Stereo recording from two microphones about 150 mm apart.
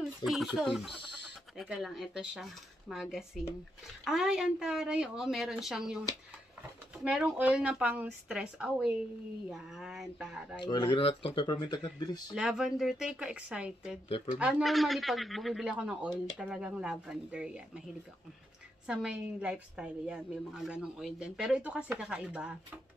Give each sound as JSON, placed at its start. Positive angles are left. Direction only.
{"t": 0.2, "sound": "a woman's voice", "side_deg": 0}
{"t": 7.1, "sound": "a woman's voice", "side_deg": -10}
{"t": 10.5, "sound": "speech", "side_deg": 30}
{"t": 12.4, "sound": "a woman's voice", "side_deg": -5}
{"t": 14.0, "sound": "speech", "side_deg": 35}
{"t": 14.4, "sound": "a woman's voice", "side_deg": 0}
{"t": 18.9, "sound": "a woman's voice", "side_deg": -5}